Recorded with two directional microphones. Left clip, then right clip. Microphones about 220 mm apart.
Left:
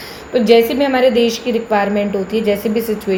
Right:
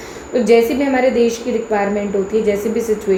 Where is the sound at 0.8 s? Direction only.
20° left (ahead or behind).